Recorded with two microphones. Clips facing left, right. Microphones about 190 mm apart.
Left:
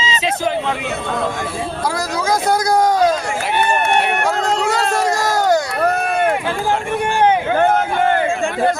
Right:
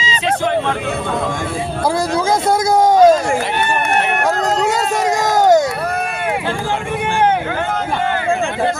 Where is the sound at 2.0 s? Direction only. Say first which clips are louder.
Right 2 dB; 25° right (ahead or behind).